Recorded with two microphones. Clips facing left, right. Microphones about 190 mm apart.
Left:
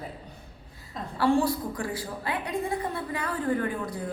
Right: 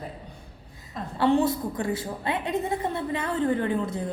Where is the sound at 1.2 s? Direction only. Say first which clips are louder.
Right 2 dB; 20° right (ahead or behind).